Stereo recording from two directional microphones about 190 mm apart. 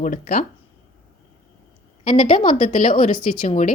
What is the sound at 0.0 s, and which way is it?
Speech, 45° left (ahead or behind).